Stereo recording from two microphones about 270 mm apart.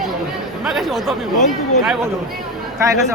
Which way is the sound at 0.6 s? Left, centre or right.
Centre.